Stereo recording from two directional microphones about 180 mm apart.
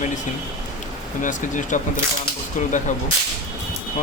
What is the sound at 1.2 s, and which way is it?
Speech, 45° left (ahead or behind).